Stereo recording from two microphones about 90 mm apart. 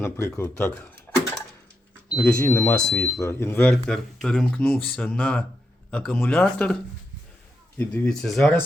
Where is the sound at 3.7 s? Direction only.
5° left (ahead or behind).